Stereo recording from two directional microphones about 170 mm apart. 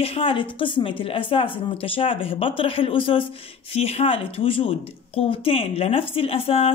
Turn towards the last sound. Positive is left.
turn(degrees=35)  # may be behind; listen again after turning